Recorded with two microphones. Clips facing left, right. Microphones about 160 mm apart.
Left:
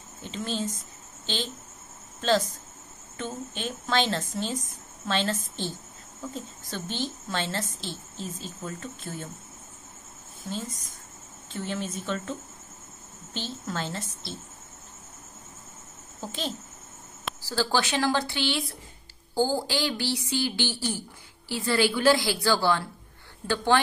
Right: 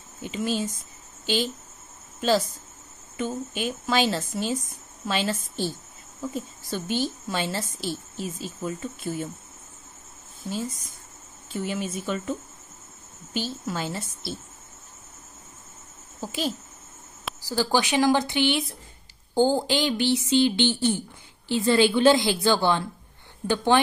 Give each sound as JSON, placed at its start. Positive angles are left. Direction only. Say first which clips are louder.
{"t": 0.2, "sound": "a woman's voice", "louder": "right 4 dB", "side_deg": -10}
{"t": 11.5, "sound": "a woman's voice", "louder": "right 3 dB", "side_deg": -10}
{"t": 16.2, "sound": "a woman's voice", "louder": "right 4 dB", "side_deg": -10}